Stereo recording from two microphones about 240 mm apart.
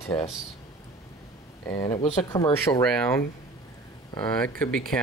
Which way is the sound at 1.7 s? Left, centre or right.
Centre.